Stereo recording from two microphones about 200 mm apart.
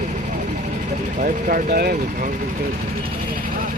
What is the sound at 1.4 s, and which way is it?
Speech, 45° right (ahead or behind).